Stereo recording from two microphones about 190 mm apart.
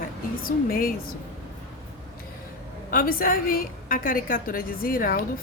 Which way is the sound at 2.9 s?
50° left (ahead or behind).